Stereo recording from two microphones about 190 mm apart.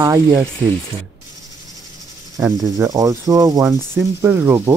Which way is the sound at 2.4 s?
20° right (ahead or behind).